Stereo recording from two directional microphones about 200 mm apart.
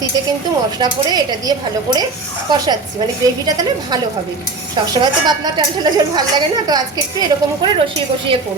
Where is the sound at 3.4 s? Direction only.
20° right (ahead or behind).